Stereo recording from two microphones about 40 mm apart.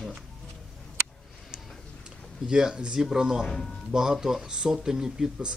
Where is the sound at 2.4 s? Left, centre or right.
Right.